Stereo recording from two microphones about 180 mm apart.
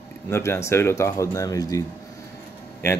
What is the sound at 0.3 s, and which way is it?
A man's voice, 15° left (ahead or behind).